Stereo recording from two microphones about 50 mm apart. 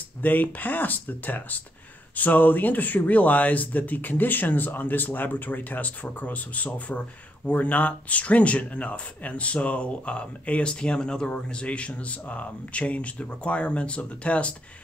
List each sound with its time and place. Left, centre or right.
0.2 s speech: left